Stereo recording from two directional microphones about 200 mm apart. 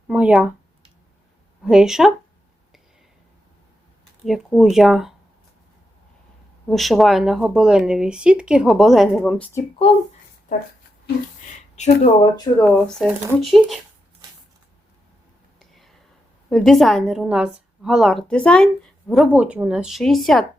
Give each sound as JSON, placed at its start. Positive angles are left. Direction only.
{"t": 0.1, "sound": "speech", "side_deg": -5}
{"t": 1.6, "sound": "a woman's voice", "side_deg": -5}
{"t": 4.3, "sound": "a woman's voice", "side_deg": 0}
{"t": 6.7, "sound": "a woman's voice", "side_deg": 0}
{"t": 11.8, "sound": "speech", "side_deg": 30}
{"t": 12.6, "sound": "a woman's voice", "side_deg": 0}
{"t": 15.5, "sound": "whispering", "side_deg": 0}
{"t": 16.5, "sound": "a woman's voice", "side_deg": 0}